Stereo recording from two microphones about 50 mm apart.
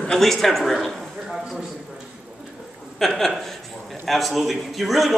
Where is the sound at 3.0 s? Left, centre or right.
Centre.